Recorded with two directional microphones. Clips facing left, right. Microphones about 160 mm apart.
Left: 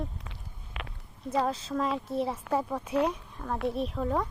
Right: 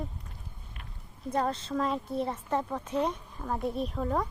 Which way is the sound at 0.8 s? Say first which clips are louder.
Left 11 dB; 90° left.